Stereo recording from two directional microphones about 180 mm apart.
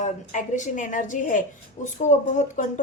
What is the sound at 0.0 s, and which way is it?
A woman's voice, 45° left (ahead or behind).